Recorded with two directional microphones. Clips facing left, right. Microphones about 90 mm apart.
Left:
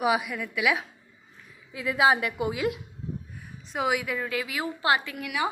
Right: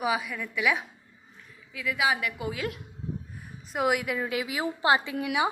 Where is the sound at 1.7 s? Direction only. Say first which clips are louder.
Left 5 dB; 30° left (ahead or behind); by 2.8 s 10° left (ahead or behind).